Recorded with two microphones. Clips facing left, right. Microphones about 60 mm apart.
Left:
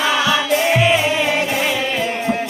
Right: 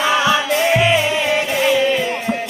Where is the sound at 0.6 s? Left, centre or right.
Centre.